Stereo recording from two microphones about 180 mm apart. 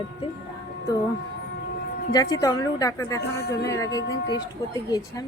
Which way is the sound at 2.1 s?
20° left (ahead or behind).